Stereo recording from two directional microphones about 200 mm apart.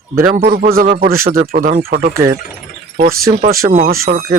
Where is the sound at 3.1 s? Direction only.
50° right (ahead or behind).